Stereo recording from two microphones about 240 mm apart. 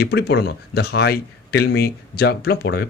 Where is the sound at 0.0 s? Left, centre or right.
Left.